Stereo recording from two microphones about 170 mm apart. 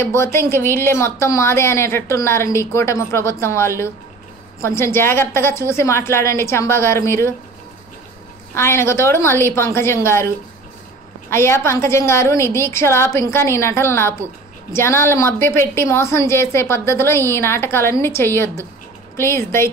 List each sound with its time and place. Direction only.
0.0 s a woman's voice: 15° left (ahead or behind)
8.5 s a woman's voice: 15° left (ahead or behind)